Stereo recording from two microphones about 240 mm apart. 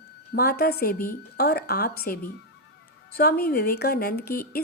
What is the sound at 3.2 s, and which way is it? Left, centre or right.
Speech, left.